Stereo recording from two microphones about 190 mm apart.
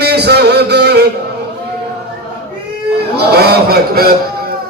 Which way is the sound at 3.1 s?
55° right (ahead or behind).